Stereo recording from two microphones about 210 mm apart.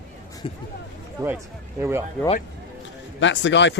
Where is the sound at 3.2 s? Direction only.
60° left (ahead or behind).